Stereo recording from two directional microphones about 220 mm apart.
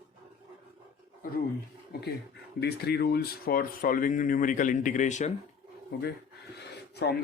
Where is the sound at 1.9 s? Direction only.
45° left (ahead or behind).